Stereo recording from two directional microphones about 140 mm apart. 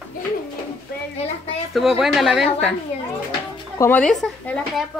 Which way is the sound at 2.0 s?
Centre (ahead or behind).